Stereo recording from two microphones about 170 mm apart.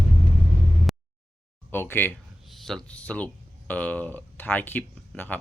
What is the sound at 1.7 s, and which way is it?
Speech, 15° left (ahead or behind).